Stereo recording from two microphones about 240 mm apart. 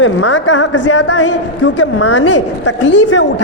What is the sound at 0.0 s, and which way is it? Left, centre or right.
A woman's voice, left.